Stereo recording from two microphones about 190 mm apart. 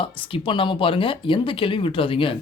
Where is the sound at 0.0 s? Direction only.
25° left (ahead or behind).